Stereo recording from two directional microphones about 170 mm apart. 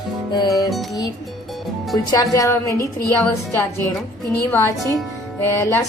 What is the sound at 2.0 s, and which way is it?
A woman's voice, 20° left (ahead or behind).